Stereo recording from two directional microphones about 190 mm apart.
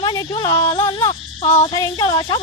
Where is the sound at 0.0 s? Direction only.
25° left (ahead or behind).